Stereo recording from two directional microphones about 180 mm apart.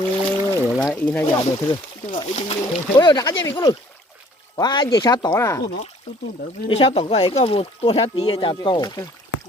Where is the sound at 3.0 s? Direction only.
20° left (ahead or behind).